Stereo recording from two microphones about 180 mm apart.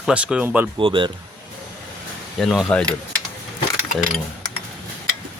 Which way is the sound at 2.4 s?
Centre (ahead or behind).